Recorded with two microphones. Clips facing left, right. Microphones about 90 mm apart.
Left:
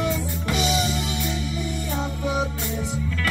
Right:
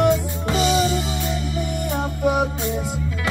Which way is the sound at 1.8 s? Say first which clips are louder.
Right 8 dB; 55° right (ahead or behind).